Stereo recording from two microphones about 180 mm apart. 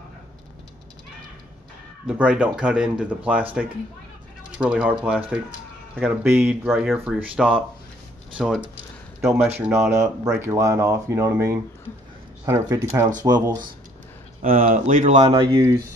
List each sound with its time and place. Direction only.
2.0 s speech: 5° right (ahead or behind)
14.4 s speech: 50° right (ahead or behind); by 15.6 s 30° right (ahead or behind)